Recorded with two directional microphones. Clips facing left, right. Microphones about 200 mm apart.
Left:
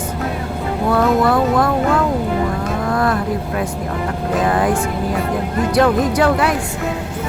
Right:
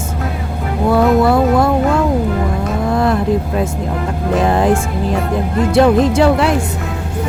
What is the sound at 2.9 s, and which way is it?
Speech, 25° right (ahead or behind).